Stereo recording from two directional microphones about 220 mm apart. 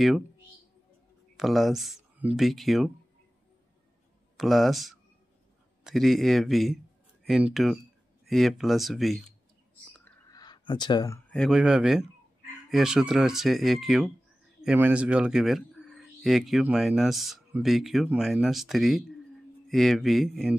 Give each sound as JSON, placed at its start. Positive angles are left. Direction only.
{"t": 1.3, "sound": "speech", "side_deg": 0}
{"t": 4.4, "sound": "speech", "side_deg": 0}
{"t": 10.3, "sound": "speech", "side_deg": 20}